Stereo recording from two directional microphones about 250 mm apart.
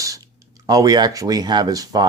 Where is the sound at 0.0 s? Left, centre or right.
Centre.